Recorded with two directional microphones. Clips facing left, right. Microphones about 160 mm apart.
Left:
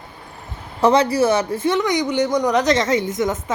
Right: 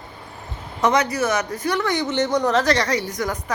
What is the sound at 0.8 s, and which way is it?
Speech, 30° left (ahead or behind).